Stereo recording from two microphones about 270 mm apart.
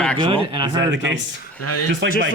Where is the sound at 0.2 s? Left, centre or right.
Centre.